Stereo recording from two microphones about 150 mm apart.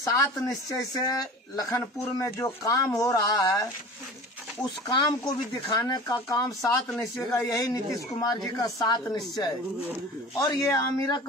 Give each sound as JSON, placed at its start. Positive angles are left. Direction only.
{"t": 0.0, "sound": "speech", "side_deg": 20}
{"t": 5.7, "sound": "speech", "side_deg": 25}
{"t": 10.5, "sound": "speech", "side_deg": 25}